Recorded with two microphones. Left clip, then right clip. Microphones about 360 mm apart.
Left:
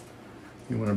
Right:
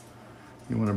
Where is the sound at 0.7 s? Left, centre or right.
Centre.